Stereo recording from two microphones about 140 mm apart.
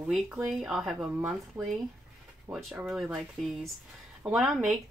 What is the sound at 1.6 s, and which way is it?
Speech, 20° right (ahead or behind).